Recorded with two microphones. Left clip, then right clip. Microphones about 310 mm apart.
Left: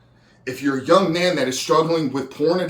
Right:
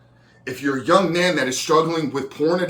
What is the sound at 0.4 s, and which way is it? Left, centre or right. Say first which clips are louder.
Speech: left 1 dB; centre.